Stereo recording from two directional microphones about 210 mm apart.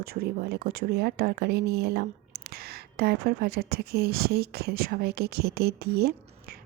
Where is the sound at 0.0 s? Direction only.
45° right (ahead or behind).